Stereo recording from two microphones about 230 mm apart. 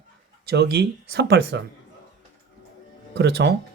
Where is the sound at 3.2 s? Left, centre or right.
Right.